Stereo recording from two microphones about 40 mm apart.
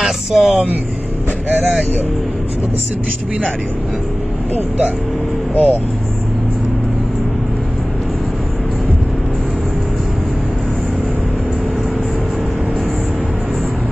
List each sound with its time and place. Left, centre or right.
0.0 s speech: centre
5.5 s speech: left